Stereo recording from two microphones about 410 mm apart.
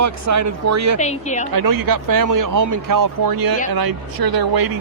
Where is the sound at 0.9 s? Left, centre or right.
Centre.